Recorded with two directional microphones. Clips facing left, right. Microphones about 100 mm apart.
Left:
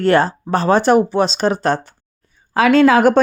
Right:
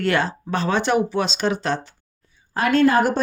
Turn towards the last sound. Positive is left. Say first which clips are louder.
# left 6 dB
turn(degrees=90)